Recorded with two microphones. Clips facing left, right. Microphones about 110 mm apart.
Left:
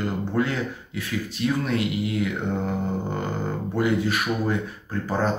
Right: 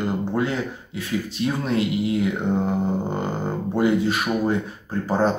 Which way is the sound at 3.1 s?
25° right (ahead or behind).